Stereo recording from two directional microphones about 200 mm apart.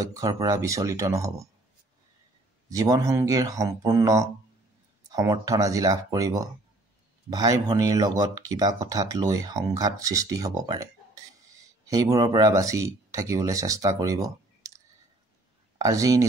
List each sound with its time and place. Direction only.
0.0 s speech: 15° right (ahead or behind)
2.7 s speech: 15° right (ahead or behind)
15.8 s speech: 15° right (ahead or behind)